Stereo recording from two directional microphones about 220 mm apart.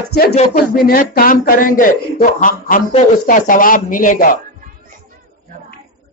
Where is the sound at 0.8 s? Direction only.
40° left (ahead or behind).